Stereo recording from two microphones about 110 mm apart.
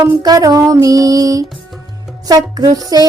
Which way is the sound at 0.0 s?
35° right (ahead or behind).